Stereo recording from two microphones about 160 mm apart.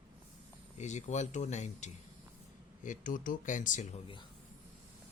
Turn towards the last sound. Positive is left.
turn(degrees=55)  # may be behind; listen again after turning